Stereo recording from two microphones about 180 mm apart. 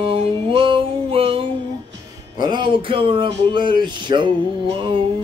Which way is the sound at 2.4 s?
25° right (ahead or behind).